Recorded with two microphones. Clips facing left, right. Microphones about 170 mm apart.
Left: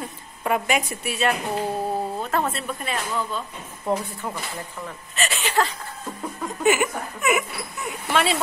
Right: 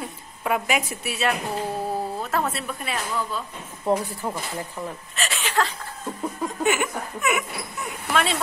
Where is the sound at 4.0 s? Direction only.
30° right (ahead or behind).